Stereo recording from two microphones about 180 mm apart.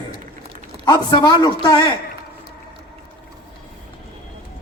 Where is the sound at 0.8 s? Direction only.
20° left (ahead or behind).